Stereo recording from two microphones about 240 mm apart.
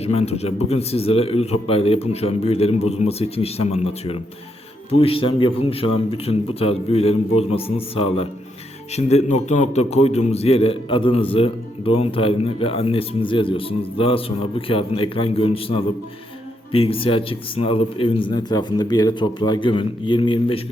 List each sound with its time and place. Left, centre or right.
0.0 s a man's voice: left